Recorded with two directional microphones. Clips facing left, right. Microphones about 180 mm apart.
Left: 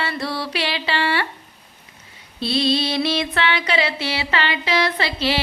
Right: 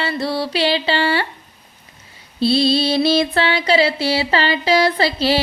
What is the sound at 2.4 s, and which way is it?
Speech, 35° right (ahead or behind).